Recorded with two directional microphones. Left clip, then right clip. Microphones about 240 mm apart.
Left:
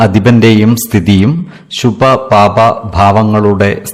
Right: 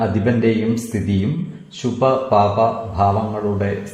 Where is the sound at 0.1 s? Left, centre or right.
Left.